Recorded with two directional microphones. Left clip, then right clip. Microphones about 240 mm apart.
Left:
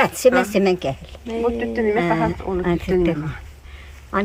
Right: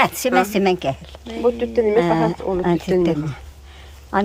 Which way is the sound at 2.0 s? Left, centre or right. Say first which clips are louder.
Right 2 dB; right.